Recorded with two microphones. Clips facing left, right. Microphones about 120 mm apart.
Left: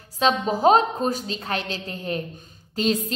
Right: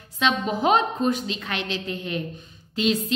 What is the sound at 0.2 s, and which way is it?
A woman's voice, 35° left (ahead or behind).